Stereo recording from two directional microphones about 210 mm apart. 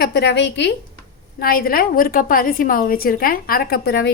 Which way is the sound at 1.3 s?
45° left (ahead or behind).